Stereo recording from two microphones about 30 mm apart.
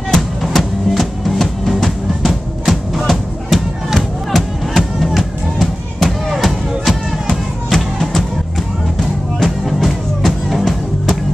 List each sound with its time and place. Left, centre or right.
0.1 s music: centre
2.2 s drum: centre
3.1 s music: centre
8.0 s music: centre
9.4 s music: centre